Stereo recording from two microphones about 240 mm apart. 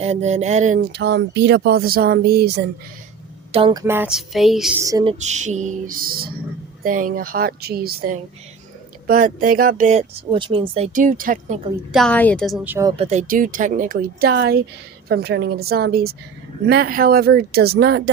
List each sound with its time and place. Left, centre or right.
0.0 s speech: right
3.5 s speech: right; by 4.7 s centre
4.8 s a sound: centre
5.2 s speech: right
11.9 s speech: centre
13.0 s speech: right